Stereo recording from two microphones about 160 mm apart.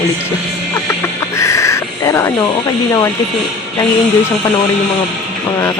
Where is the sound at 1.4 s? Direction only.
20° left (ahead or behind).